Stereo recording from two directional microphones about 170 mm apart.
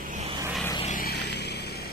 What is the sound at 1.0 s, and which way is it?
Vehicle, 70° left (ahead or behind).